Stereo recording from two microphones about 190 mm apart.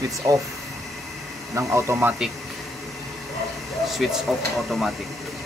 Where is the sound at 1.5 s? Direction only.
15° right (ahead or behind).